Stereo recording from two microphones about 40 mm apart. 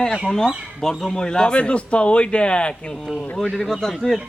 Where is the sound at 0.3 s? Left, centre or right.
Centre; by 2.7 s left.